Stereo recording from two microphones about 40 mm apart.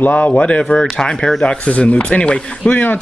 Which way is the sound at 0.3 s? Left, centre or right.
Left.